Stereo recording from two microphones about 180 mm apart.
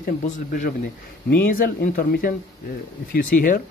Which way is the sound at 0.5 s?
50° left (ahead or behind).